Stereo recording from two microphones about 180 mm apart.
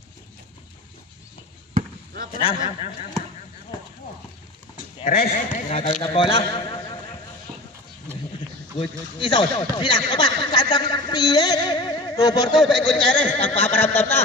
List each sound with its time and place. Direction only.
1.7 s basketball bounce: 40° right (ahead or behind)
2.3 s speech: 40° left (ahead or behind)
5.0 s a man's voice: 55° left (ahead or behind)
5.7 s speech: 40° left (ahead or behind)
6.0 s a man's voice: 30° left (ahead or behind)
8.7 s speech: 30° left (ahead or behind)
12.5 s speech: centre (ahead or behind)
13.3 s a sound: 10° left (ahead or behind)